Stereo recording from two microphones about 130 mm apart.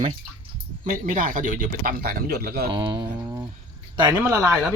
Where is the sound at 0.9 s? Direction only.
90° right.